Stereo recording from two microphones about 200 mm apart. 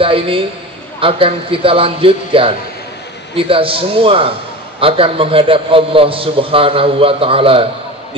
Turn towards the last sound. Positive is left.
turn(degrees=-25)  # may be behind; listen again after turning